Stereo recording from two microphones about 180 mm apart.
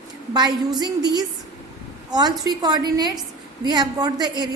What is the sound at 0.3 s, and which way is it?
A woman's voice, 25° right (ahead or behind).